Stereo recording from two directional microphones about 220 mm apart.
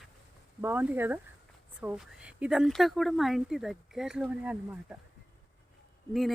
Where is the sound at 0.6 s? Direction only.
10° right (ahead or behind).